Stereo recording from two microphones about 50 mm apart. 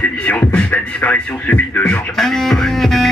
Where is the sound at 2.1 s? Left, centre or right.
Centre.